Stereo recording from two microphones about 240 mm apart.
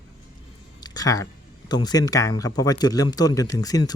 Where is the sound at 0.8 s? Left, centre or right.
Centre.